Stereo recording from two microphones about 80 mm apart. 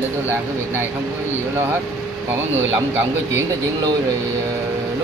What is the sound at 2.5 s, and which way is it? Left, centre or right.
Speech, right.